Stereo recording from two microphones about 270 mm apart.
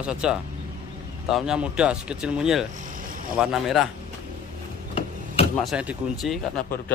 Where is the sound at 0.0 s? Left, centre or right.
Centre.